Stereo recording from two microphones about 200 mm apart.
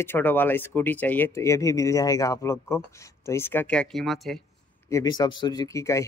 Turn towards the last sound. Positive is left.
turn(degrees=15)  # may be behind; listen again after turning